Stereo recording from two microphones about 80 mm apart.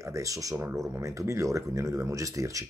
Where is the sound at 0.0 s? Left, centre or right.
Right.